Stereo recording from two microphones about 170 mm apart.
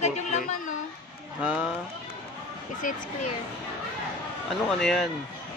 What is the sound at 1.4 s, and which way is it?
Speech, 5° right (ahead or behind).